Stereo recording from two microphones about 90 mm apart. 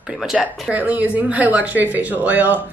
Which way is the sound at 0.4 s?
15° right (ahead or behind).